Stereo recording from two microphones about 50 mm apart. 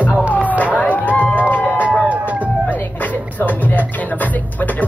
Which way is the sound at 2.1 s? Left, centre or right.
Right.